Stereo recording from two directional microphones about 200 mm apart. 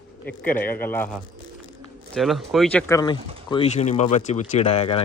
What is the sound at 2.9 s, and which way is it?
Speech, 20° left (ahead or behind).